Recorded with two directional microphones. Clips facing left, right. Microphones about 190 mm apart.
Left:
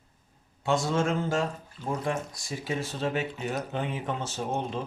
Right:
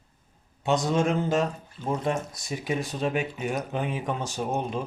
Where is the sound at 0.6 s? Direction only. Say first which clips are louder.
Right 2 dB; 20° right (ahead or behind).